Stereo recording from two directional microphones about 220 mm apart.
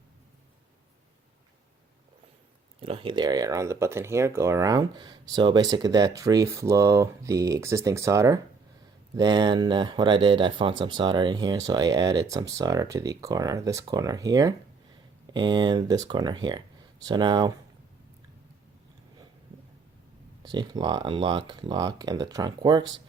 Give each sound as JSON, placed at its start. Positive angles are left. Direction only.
{"t": 2.8, "sound": "speech", "side_deg": -25}
{"t": 20.4, "sound": "speech", "side_deg": -20}